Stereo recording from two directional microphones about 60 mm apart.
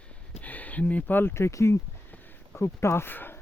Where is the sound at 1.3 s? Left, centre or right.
Left.